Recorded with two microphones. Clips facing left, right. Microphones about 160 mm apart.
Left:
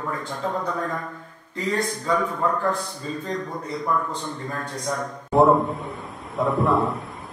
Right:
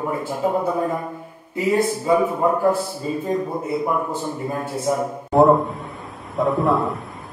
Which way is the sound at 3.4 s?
25° right (ahead or behind).